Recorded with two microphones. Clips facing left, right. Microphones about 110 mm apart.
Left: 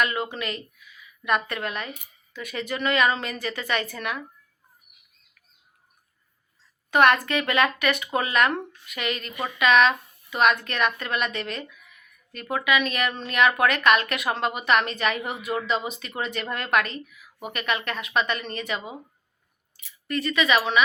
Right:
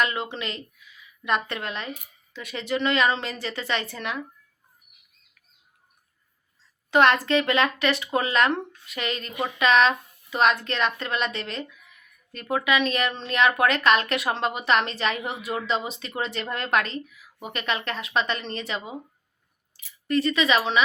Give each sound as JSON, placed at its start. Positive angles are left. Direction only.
{"t": 0.0, "sound": "speech", "side_deg": -25}
{"t": 6.9, "sound": "speech", "side_deg": -25}